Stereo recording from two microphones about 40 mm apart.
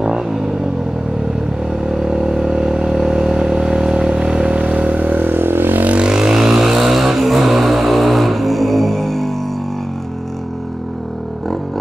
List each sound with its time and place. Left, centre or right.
0.0 s vehicle: centre
1.8 s vehicle: centre; by 5.1 s right
5.1 s vehicle: right
5.9 s vehicle: right; by 9.3 s centre